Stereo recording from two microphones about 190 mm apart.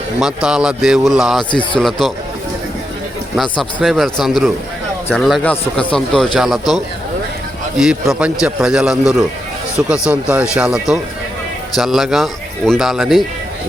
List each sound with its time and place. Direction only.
0.2 s speech: 5° right (ahead or behind)
1.5 s a man's voice: 25° left (ahead or behind)
1.8 s speech: centre (ahead or behind)
3.6 s speech: centre (ahead or behind)